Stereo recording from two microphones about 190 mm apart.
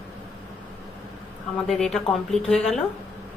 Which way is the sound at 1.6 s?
Centre (ahead or behind).